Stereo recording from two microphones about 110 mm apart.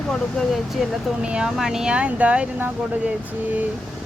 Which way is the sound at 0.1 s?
Centre (ahead or behind).